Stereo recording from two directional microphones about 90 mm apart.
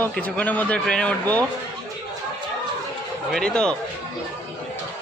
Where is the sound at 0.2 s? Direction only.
15° left (ahead or behind).